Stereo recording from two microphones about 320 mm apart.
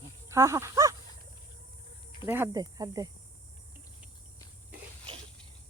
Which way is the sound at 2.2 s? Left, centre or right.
Centre.